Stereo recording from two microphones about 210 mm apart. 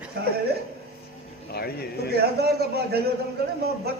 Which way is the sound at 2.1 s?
50° right (ahead or behind).